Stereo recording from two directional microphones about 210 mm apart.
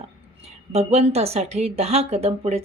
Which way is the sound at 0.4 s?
30° right (ahead or behind).